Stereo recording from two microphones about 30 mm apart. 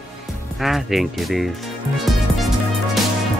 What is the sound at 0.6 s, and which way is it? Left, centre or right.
Music, centre.